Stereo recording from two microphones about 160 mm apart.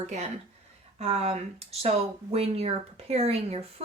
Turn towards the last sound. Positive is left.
turn(degrees=-40)  # may be behind; listen again after turning